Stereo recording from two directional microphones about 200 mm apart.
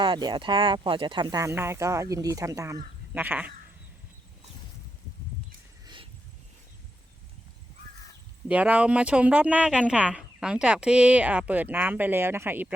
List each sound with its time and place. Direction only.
0.0 s speech: 25° right (ahead or behind)
5.8 s a sound: 25° right (ahead or behind)
8.4 s speech: 5° right (ahead or behind)